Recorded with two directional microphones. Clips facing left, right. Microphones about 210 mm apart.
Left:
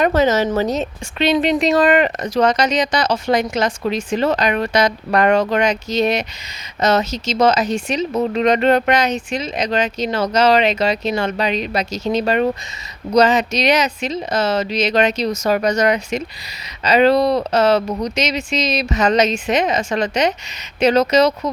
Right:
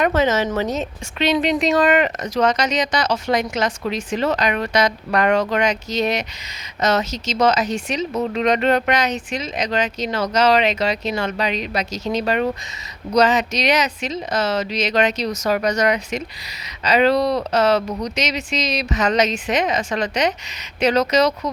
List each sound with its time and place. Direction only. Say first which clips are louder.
0.0 s a woman's voice: left 3 dB; 40° left (ahead or behind)